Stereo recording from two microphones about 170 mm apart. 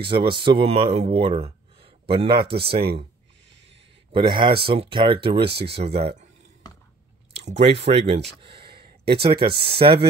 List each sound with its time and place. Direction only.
0.0 s speech: 30° right (ahead or behind)
4.1 s speech: 30° right (ahead or behind)
5.4 s speech: 75° right (ahead or behind)
5.7 s speech: 35° right (ahead or behind)
7.3 s speech: 40° right (ahead or behind)
8.4 s a sound: 30° right (ahead or behind)
9.4 s speech: 30° right (ahead or behind)